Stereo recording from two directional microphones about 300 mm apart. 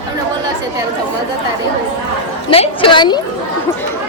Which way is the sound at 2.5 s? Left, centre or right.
Centre.